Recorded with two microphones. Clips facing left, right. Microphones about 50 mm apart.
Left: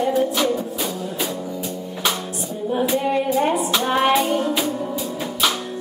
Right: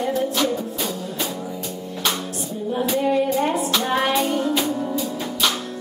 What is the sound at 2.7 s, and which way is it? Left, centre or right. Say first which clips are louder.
Music: even; centre.